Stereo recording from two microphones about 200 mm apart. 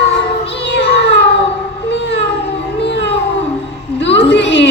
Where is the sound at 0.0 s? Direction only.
60° left (ahead or behind).